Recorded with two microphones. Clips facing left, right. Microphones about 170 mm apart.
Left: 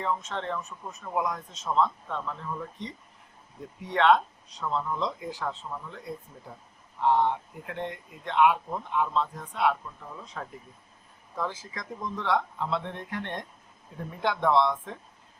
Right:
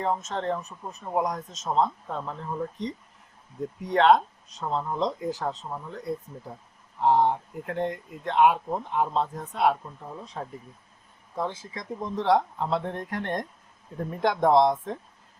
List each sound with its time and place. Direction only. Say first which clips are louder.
0.0 s speech: right 3 dB; 40° right (ahead or behind)
7.0 s speech: right 2 dB; 40° right (ahead or behind)
10.4 s speech: right 3 dB; 30° right (ahead or behind)